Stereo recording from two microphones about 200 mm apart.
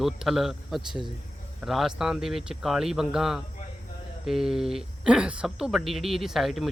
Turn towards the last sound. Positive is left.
turn(degrees=0)  # may be behind; listen again after turning